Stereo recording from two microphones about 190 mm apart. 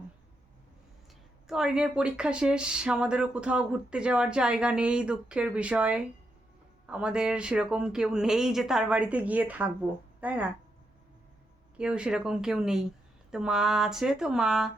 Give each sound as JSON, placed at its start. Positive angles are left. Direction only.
{"t": 1.5, "sound": "speech", "side_deg": -5}
{"t": 11.8, "sound": "speech", "side_deg": -5}